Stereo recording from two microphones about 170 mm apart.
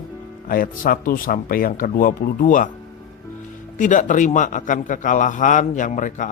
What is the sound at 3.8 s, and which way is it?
A man's voice, 50° left (ahead or behind).